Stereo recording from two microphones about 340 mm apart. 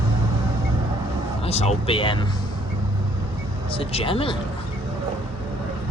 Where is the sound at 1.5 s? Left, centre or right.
Centre.